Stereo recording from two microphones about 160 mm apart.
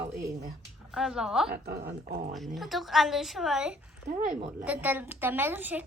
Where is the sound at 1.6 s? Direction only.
85° right.